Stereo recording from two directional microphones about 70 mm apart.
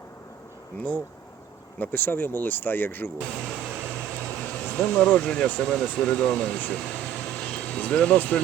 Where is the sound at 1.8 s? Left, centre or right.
Left.